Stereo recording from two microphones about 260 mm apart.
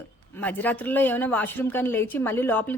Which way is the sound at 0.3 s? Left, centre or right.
Centre.